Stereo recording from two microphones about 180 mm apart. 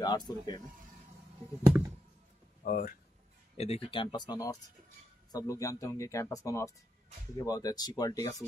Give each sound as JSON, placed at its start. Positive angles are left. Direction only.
{"t": 0.0, "sound": "speech", "side_deg": 20}
{"t": 2.6, "sound": "speech", "side_deg": 50}
{"t": 3.5, "sound": "speech", "side_deg": 35}